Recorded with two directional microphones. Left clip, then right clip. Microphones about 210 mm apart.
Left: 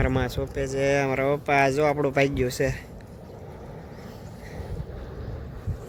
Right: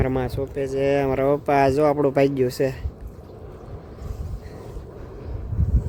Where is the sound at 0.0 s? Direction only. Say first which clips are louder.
Right 2 dB; 15° right (ahead or behind).